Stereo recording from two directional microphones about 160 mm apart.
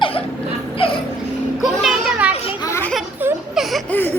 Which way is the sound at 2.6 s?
15° left (ahead or behind).